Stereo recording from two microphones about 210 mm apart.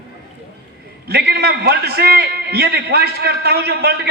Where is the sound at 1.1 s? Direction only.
50° right (ahead or behind).